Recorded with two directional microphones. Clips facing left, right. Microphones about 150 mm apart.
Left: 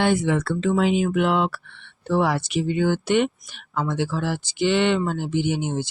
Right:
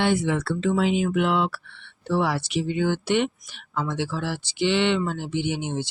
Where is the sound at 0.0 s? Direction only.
50° left (ahead or behind).